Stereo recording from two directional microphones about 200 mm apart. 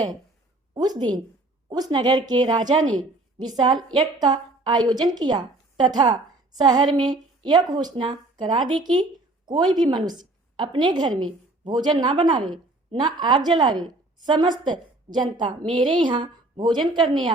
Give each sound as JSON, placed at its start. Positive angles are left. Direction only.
{"t": 0.7, "sound": "a woman's voice", "side_deg": -20}